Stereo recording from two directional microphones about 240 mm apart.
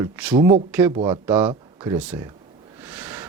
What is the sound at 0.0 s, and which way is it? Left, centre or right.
Speech, centre.